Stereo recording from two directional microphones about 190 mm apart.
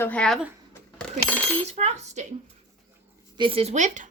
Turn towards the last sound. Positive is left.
turn(degrees=-40)  # may be behind; listen again after turning